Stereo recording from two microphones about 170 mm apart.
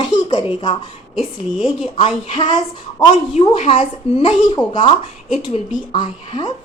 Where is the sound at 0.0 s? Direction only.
25° left (ahead or behind).